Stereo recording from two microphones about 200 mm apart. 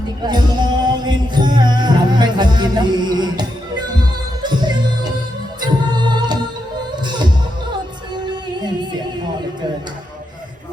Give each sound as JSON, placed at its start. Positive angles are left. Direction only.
{"t": 0.2, "sound": "music", "side_deg": -20}
{"t": 8.1, "sound": "music", "side_deg": -20}